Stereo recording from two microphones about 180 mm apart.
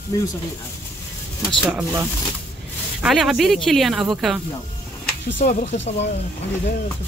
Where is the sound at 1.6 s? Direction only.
10° right (ahead or behind).